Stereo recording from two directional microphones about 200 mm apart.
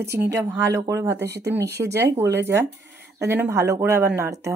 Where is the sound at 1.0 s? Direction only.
60° right (ahead or behind).